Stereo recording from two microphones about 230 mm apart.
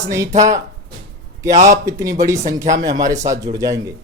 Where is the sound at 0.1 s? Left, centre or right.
Centre.